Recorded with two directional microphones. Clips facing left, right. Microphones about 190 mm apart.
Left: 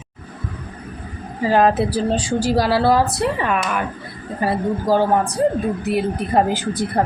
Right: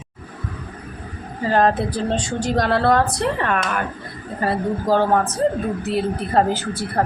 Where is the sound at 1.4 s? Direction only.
10° left (ahead or behind).